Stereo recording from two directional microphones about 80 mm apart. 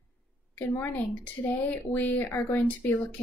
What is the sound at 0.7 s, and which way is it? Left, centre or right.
A woman's voice, left.